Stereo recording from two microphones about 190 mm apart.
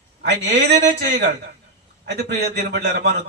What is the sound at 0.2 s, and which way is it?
Speech, 60° right (ahead or behind).